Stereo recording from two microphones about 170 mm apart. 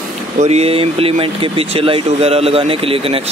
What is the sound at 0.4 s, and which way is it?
Speech, 40° right (ahead or behind).